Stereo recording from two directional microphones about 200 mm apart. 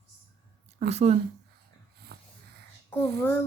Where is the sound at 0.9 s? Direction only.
30° right (ahead or behind).